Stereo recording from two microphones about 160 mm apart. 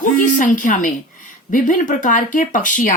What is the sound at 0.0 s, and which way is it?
A woman's voice, 55° left (ahead or behind).